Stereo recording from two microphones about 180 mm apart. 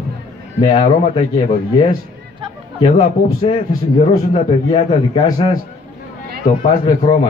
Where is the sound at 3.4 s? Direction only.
35° left (ahead or behind).